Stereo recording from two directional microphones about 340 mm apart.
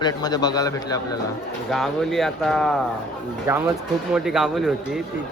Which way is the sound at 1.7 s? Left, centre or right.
Centre.